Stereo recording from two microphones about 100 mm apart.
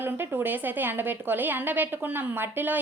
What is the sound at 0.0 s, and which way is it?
A woman's voice, 20° right (ahead or behind).